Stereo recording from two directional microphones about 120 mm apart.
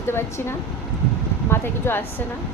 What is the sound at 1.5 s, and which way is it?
Speech, 20° left (ahead or behind).